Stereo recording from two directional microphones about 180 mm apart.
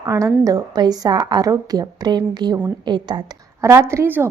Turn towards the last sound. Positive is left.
turn(degrees=-10)  # may be behind; listen again after turning